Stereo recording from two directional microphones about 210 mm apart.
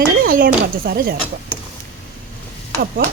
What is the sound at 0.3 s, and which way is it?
Speech, 45° right (ahead or behind).